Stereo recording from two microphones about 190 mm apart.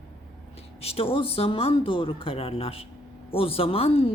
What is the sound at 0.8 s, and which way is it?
A woman's voice, 30° left (ahead or behind).